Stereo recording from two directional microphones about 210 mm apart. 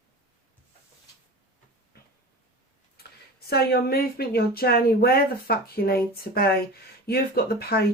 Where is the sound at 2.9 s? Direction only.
50° left (ahead or behind).